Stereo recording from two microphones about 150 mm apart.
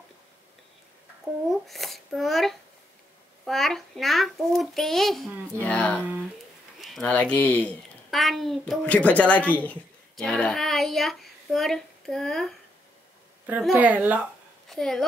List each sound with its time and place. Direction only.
1.5 s a child's voice: centre (ahead or behind)
13.5 s a woman's voice: 5° right (ahead or behind)
14.7 s a child's voice: centre (ahead or behind)